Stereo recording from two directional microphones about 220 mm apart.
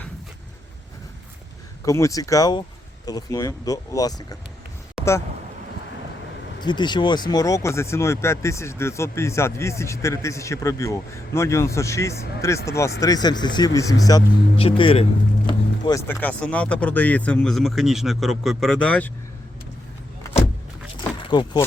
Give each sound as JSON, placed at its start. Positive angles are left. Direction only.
{"t": 1.8, "sound": "speech", "side_deg": 15}
{"t": 6.6, "sound": "speech", "side_deg": 20}
{"t": 20.2, "sound": "vehicle", "side_deg": 15}
{"t": 21.2, "sound": "speech", "side_deg": 20}